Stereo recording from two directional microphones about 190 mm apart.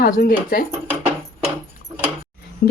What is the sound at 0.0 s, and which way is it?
Speech, 50° left (ahead or behind).